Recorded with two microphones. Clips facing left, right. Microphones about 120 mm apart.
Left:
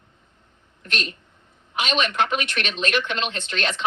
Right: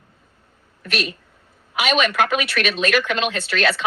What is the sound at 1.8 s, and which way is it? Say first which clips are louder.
Speech: right 4 dB; 90° right.